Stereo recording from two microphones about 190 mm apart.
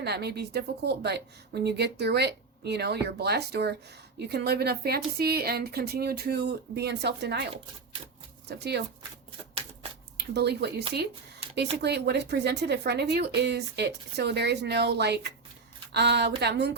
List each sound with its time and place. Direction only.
0.0 s speech: 60° right (ahead or behind)
10.2 s speech: 60° right (ahead or behind)